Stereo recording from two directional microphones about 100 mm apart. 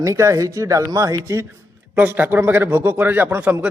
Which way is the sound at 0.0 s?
30° right (ahead or behind).